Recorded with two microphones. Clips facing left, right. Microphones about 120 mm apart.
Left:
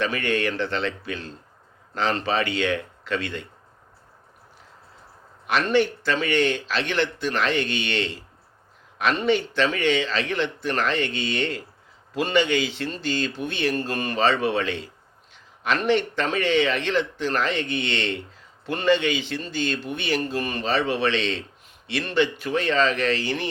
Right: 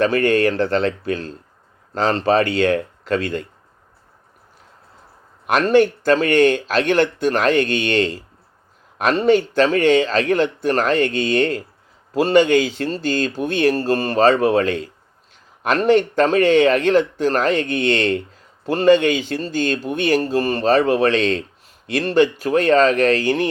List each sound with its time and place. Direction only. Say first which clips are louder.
0.0 s speech: right 8 dB; 40° right (ahead or behind)
5.5 s speech: right 6 dB; 50° right (ahead or behind)